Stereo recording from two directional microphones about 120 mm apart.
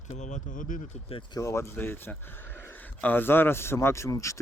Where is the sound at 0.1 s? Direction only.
90° left.